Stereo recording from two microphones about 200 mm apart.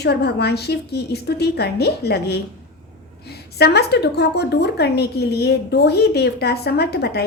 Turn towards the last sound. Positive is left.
turn(degrees=55)  # may be behind; listen again after turning